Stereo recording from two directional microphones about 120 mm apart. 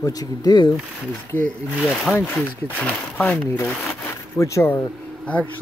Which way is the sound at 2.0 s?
15° left (ahead or behind).